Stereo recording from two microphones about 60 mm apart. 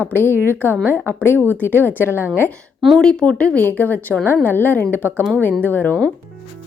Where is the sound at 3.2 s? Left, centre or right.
Centre.